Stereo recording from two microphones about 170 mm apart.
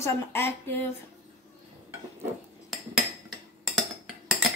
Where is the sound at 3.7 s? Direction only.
Centre (ahead or behind).